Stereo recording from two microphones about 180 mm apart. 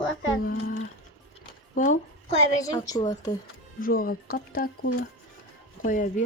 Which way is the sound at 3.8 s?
55° left (ahead or behind).